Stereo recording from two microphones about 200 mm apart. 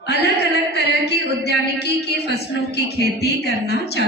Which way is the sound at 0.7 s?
55° left (ahead or behind).